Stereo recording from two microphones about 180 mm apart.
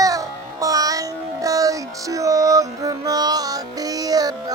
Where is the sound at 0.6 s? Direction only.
20° right (ahead or behind).